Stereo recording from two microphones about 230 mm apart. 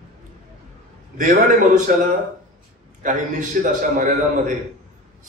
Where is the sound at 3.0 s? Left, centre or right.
Right.